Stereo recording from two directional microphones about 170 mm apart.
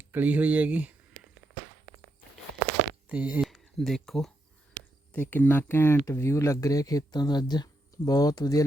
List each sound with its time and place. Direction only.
0.0 s speech: 10° right (ahead or behind)
3.1 s speech: 10° right (ahead or behind); by 8.6 s 20° left (ahead or behind)